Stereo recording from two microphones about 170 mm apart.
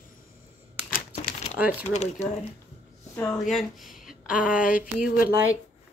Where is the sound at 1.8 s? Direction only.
40° left (ahead or behind).